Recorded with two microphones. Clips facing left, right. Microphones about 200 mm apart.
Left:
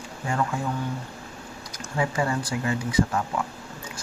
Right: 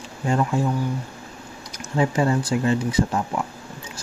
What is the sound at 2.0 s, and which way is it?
Speech, 25° right (ahead or behind).